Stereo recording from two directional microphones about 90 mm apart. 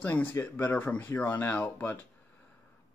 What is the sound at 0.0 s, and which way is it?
Speech, 20° left (ahead or behind).